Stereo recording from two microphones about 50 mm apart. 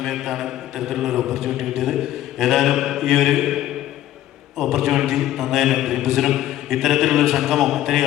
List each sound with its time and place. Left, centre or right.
0.0 s mantra: centre
4.5 s a man's voice: centre